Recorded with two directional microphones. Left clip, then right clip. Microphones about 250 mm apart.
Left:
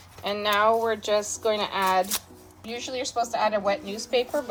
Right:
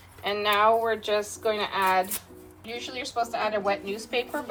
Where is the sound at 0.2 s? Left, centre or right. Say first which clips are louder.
Even; left.